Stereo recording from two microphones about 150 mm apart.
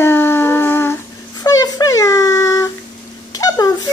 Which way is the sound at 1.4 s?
25° left (ahead or behind).